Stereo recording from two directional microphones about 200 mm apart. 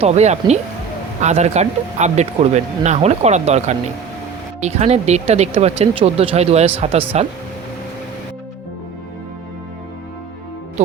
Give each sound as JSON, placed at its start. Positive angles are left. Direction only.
{"t": 0.0, "sound": "speech", "side_deg": -35}